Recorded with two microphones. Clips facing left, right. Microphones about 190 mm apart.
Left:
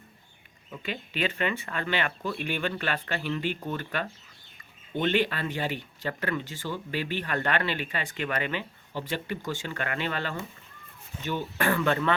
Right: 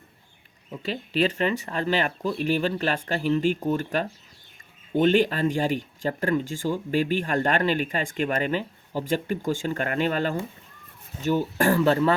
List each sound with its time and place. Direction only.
0.8 s speech: 40° right (ahead or behind)
4.9 s speech: 45° right (ahead or behind)